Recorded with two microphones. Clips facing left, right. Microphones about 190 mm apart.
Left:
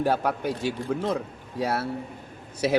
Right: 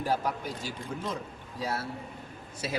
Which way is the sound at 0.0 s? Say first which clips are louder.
Left 6 dB; 70° left (ahead or behind).